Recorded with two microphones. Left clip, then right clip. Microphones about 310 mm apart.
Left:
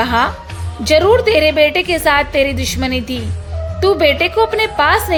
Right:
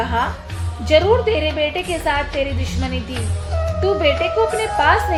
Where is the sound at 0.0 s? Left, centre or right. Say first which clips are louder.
Left 6 dB; left.